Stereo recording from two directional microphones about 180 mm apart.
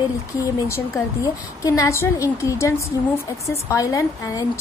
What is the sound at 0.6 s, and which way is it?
A woman's voice, 15° left (ahead or behind).